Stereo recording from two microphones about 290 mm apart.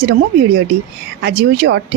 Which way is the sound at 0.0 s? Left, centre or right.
Right.